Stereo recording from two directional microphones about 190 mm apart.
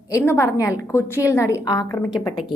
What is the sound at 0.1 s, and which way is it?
A woman's voice, 15° left (ahead or behind).